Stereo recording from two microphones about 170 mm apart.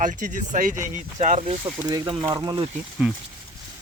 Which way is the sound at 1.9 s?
20° right (ahead or behind).